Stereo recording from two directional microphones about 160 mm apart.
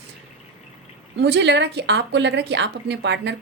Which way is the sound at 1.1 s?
90° right.